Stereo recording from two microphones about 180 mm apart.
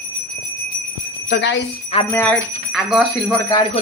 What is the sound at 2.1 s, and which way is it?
Speech, 10° left (ahead or behind).